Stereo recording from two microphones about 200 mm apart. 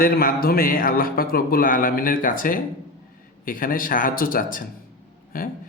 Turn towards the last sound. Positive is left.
turn(degrees=45)  # may be behind; listen again after turning